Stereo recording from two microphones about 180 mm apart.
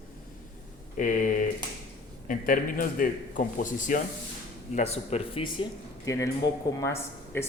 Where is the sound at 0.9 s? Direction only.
45° left (ahead or behind).